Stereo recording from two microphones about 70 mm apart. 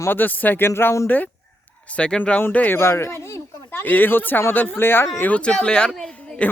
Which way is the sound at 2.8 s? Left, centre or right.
Left.